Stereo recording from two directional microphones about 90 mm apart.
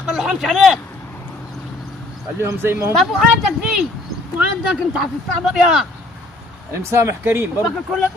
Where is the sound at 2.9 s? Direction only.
Centre (ahead or behind).